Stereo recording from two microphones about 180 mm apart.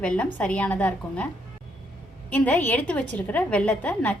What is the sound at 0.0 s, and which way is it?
A woman's voice, 5° left (ahead or behind).